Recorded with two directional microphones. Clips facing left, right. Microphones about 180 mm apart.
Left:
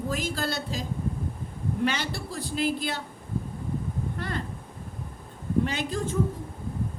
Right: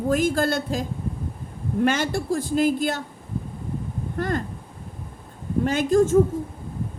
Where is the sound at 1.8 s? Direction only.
50° right (ahead or behind).